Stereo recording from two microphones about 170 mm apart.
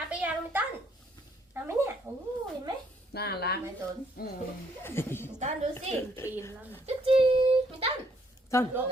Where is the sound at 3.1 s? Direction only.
70° left (ahead or behind).